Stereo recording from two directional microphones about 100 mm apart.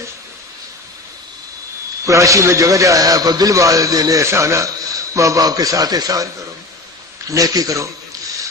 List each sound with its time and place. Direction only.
2.0 s a man's voice: 30° right (ahead or behind)
7.3 s a man's voice: 35° right (ahead or behind)